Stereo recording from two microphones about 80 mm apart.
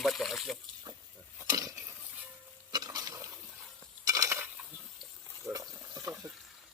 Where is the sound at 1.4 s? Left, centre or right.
Right.